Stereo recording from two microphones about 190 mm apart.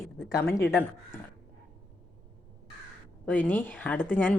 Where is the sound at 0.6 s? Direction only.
10° left (ahead or behind).